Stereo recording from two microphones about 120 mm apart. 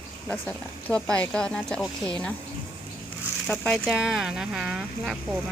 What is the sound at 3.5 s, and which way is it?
Speech, 10° left (ahead or behind).